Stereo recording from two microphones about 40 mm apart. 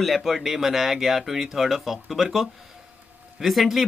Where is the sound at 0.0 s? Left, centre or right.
Centre.